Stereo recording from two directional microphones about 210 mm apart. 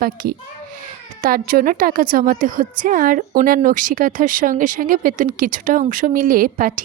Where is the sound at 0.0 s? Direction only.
45° right (ahead or behind).